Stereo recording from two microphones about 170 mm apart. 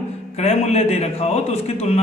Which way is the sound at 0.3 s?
40° left (ahead or behind).